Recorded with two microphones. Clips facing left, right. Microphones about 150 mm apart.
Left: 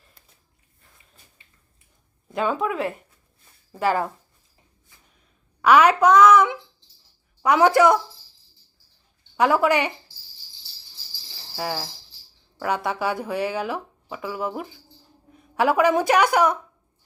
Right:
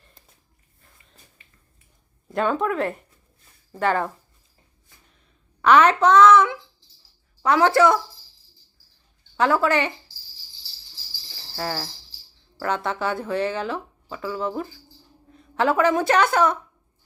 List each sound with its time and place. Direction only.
2.2 s speech: centre (ahead or behind)
5.6 s speech: 10° left (ahead or behind)
9.4 s speech: 15° left (ahead or behind)
11.5 s speech: 10° left (ahead or behind)